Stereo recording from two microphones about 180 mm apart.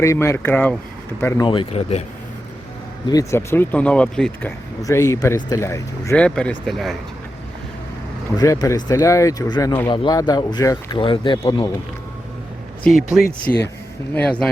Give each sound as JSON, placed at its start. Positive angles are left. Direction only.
{"t": 0.0, "sound": "speech", "side_deg": 15}
{"t": 1.5, "sound": "speech", "side_deg": 30}
{"t": 3.1, "sound": "speech", "side_deg": 20}
{"t": 4.8, "sound": "speech", "side_deg": 15}
{"t": 8.4, "sound": "speech", "side_deg": 20}
{"t": 13.1, "sound": "speech", "side_deg": 0}